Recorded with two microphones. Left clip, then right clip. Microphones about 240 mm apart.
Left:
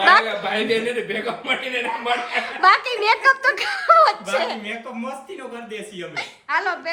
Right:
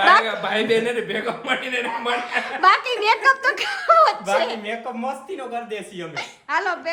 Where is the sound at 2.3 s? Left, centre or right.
Centre.